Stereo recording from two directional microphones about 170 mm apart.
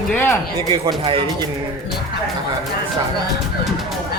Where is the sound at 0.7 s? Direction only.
30° right (ahead or behind).